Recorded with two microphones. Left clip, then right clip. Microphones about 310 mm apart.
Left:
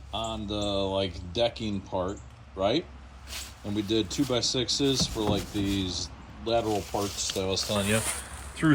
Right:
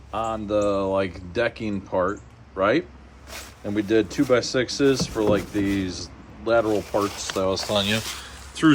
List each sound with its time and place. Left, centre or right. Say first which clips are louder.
0.1 s speech: right 8 dB; centre
1.3 s speech: right 1 dB; centre
1.9 s speech: right 8 dB; centre
3.8 s speech: right 7 dB; centre
6.7 s speech: right 6 dB; centre
7.4 s speech: right 7 dB; centre
7.7 s speech: right 5 dB; centre